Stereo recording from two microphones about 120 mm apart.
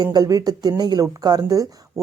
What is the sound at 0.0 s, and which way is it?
Speech, 30° right (ahead or behind).